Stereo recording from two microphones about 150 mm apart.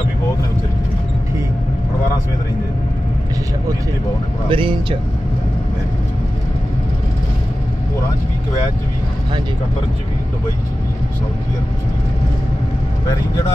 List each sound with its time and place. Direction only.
4.5 s speech: 35° right (ahead or behind)